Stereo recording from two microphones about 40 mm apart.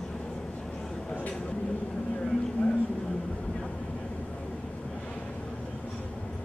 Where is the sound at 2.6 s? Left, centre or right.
Left.